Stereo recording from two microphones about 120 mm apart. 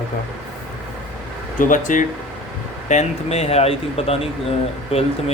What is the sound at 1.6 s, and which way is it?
Speech, 90° left.